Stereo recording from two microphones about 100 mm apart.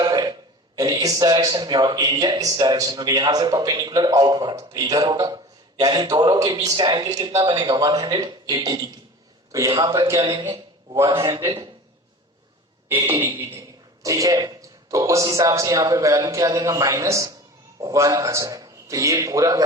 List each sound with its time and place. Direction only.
0.0 s a sound: 45° right (ahead or behind)
0.8 s a man's voice: 40° right (ahead or behind)
11.0 s a man's voice: 40° right (ahead or behind)
13.1 s a man's voice: 25° right (ahead or behind)